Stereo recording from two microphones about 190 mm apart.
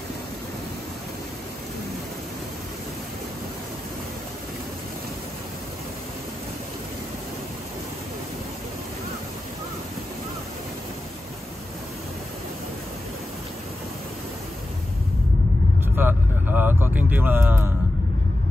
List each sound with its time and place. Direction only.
16.0 s vehicle: 10° right (ahead or behind)